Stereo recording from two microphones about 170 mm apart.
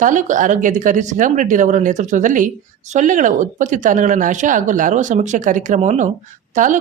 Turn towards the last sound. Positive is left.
turn(degrees=-50)  # may be behind; listen again after turning